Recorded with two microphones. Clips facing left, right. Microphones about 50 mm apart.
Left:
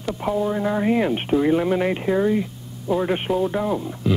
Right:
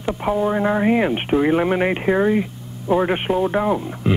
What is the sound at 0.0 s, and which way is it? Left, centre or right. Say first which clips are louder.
Speech: right 3 dB; right.